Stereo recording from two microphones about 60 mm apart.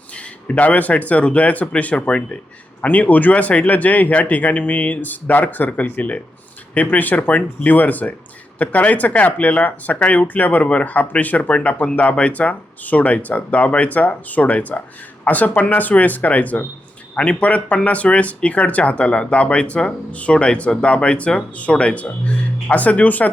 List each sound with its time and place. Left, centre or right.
0.4 s speech: left